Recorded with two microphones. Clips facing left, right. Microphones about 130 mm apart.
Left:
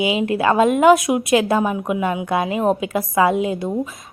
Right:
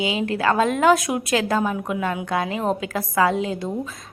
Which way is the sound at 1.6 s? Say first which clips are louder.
Left 3 dB; 15° left (ahead or behind).